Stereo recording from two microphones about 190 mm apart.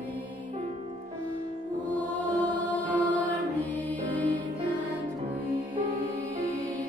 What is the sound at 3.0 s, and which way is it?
Music, 25° right (ahead or behind).